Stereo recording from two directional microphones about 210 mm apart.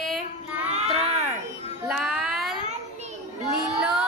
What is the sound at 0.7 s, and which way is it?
Speech, 30° right (ahead or behind).